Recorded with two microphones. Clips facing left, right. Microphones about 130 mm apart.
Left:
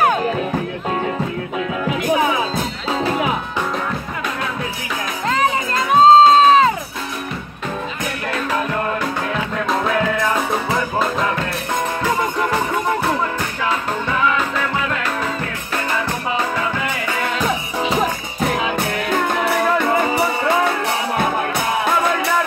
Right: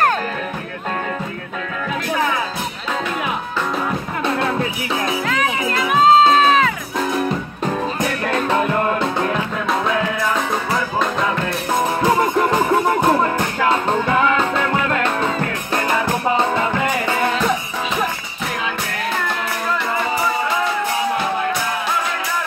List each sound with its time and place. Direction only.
5.3 s music: 30° left (ahead or behind)
19.2 s music: 50° left (ahead or behind)